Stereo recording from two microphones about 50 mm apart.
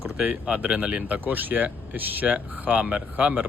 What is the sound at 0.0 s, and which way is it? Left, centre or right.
Speech, right.